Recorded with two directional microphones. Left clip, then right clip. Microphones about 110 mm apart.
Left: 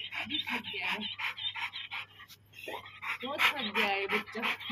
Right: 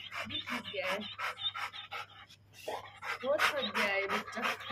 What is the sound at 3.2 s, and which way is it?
Speech, 25° right (ahead or behind).